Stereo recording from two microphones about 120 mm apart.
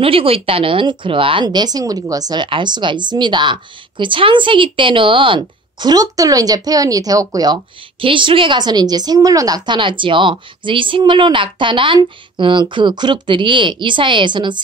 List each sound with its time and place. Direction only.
0.0 s a woman's voice: 50° right (ahead or behind)